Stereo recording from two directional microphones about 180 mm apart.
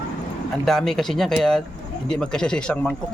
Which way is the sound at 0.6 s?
Centre (ahead or behind).